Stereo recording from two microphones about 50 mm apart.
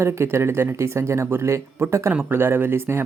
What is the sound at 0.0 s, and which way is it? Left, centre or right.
Speech, right.